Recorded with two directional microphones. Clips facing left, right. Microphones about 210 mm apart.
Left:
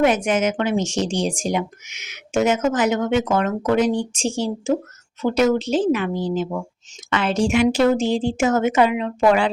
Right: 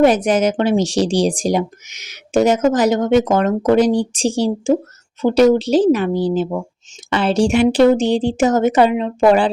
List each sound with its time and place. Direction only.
0.0 s speech: 35° right (ahead or behind)